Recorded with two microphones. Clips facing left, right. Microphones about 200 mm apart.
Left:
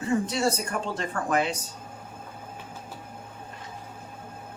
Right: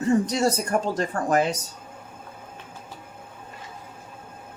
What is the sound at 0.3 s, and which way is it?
Speech, 40° right (ahead or behind).